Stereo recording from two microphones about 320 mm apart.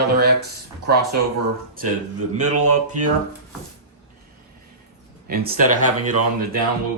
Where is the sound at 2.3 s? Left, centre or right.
Right.